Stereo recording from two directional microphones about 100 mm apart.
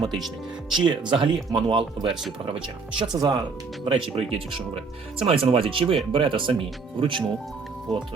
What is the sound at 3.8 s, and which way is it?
Speech, 70° right (ahead or behind).